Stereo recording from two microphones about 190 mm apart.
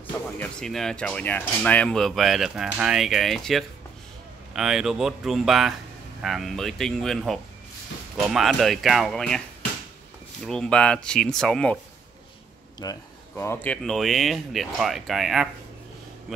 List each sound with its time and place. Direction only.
0.4 s speech: 5° left (ahead or behind)
10.4 s speech: 5° left (ahead or behind)
12.8 s speech: 20° left (ahead or behind)
13.4 s speech: 10° left (ahead or behind)